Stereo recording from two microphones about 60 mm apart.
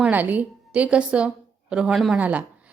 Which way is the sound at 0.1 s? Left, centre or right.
Right.